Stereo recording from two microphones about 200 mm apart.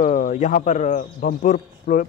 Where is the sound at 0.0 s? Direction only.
40° left (ahead or behind).